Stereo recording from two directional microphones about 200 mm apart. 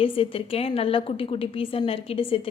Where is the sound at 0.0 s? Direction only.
30° left (ahead or behind).